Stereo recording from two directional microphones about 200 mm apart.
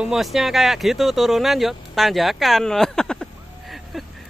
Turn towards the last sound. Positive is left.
turn(degrees=5)  # may be behind; listen again after turning